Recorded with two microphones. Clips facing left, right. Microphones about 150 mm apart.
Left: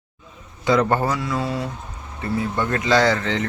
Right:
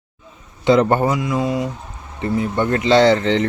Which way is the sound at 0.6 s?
25° right (ahead or behind).